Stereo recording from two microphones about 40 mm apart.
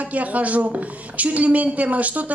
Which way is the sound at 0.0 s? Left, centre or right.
Right.